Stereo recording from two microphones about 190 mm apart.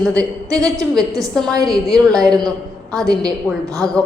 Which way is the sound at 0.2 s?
15° right (ahead or behind).